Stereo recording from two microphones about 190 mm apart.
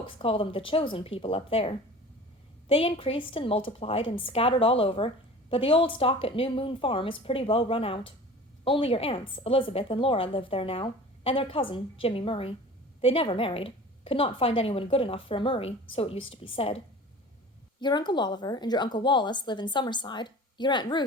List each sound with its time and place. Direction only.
0.0 s a woman's voice: 30° left (ahead or behind)